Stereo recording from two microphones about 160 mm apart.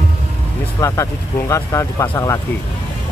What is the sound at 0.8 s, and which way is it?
Speech, 20° left (ahead or behind).